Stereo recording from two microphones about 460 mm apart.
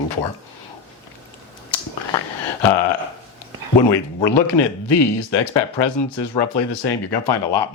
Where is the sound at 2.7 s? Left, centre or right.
Left.